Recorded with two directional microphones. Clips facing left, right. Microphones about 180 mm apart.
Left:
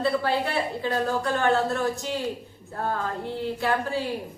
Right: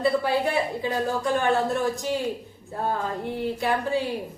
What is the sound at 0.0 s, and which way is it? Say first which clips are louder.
A woman's voice: right 2 dB; 15° right (ahead or behind).